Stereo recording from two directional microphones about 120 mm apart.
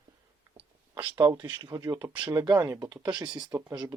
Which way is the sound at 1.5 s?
30° right (ahead or behind).